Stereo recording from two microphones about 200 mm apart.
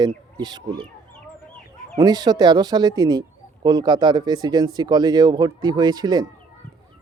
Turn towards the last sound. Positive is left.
turn(degrees=-20)  # may be behind; listen again after turning